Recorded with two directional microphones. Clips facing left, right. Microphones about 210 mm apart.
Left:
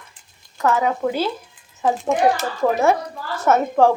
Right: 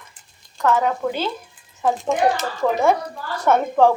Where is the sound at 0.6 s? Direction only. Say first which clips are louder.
Even; 5° left (ahead or behind).